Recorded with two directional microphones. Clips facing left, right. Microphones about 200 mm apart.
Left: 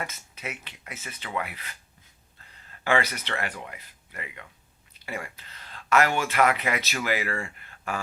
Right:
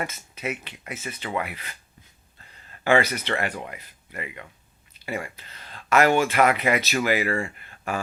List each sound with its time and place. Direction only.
0.0 s speech: 20° right (ahead or behind)
2.8 s speech: 20° right (ahead or behind)
5.7 s a sound: 25° right (ahead or behind)
6.3 s speech: 20° right (ahead or behind)